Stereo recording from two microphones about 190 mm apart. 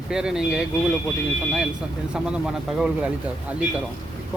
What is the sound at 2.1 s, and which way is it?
Speech, 5° right (ahead or behind).